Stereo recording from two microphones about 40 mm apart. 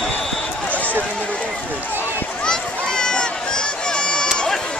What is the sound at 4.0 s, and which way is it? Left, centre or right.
Run, left.